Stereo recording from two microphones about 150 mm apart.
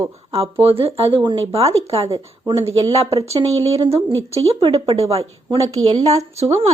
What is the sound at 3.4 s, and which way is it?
A woman's voice, 40° right (ahead or behind).